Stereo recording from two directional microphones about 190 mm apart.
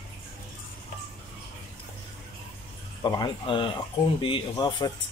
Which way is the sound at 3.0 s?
20° left (ahead or behind).